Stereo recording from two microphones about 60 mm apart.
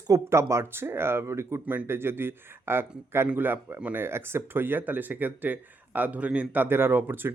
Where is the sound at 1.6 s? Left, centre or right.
Right.